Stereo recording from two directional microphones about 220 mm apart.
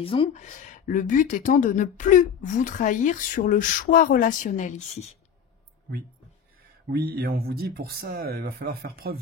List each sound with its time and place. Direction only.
0.0 s speech: 25° left (ahead or behind)
6.9 s speech: 45° right (ahead or behind)